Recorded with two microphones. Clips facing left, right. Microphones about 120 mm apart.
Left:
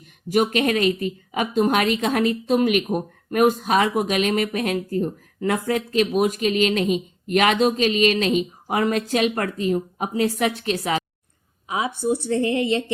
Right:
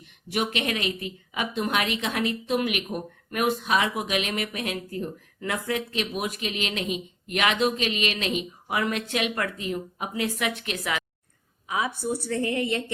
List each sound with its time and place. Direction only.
0.3 s speech: 45° left (ahead or behind)
11.9 s a woman's voice: 25° left (ahead or behind)